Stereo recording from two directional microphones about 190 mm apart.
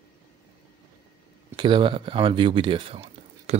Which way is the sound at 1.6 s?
25° right (ahead or behind).